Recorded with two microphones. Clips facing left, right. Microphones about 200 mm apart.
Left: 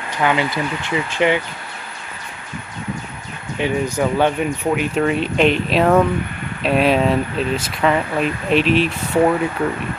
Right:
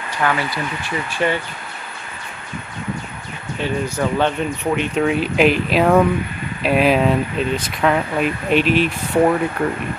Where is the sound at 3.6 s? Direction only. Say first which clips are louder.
Left 2 dB; 15° left (ahead or behind).